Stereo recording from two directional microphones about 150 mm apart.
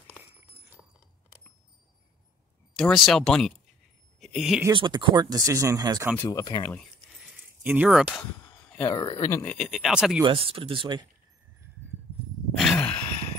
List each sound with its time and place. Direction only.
2.7 s speech: centre (ahead or behind)
4.7 s speech: 30° right (ahead or behind)
6.1 s speech: 25° left (ahead or behind)
7.6 s speech: 10° right (ahead or behind)
8.8 s speech: 25° left (ahead or behind)
9.4 s speech: 5° left (ahead or behind)
10.2 s speech: 40° right (ahead or behind)
12.5 s groan: centre (ahead or behind)